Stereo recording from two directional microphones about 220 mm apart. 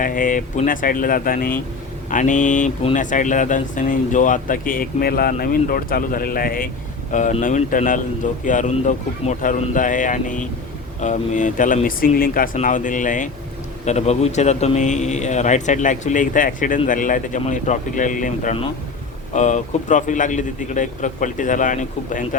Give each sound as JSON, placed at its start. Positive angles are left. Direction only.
{"t": 0.0, "sound": "speech", "side_deg": 40}